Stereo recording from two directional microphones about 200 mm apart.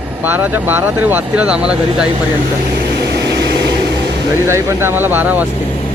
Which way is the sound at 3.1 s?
55° right (ahead or behind).